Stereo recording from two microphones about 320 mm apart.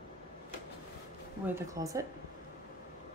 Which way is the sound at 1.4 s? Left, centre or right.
Centre.